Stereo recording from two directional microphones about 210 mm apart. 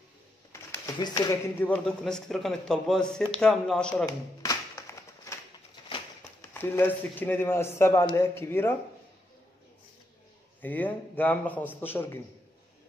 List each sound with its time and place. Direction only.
0.5 s speech: 20° left (ahead or behind)
1.7 s speech: 5° left (ahead or behind)
4.4 s a sound: 15° left (ahead or behind)
5.8 s bird: 20° left (ahead or behind)
6.4 s speech: 10° left (ahead or behind)
10.6 s speech: 5° left (ahead or behind)